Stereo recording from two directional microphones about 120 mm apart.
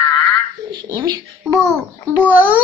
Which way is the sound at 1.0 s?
35° right (ahead or behind).